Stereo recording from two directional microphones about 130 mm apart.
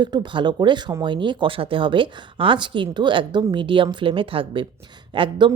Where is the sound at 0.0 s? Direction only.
35° right (ahead or behind).